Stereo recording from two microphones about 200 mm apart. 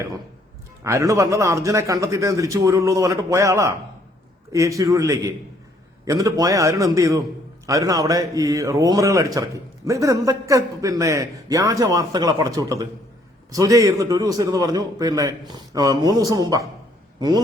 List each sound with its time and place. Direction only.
0.9 s a man's voice: 15° right (ahead or behind)